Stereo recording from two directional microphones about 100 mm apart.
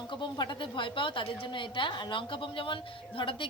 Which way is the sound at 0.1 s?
50° left (ahead or behind).